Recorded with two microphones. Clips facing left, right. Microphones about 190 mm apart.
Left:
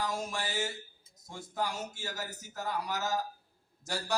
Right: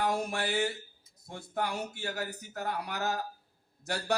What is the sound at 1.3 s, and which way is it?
A man's voice, 60° right (ahead or behind).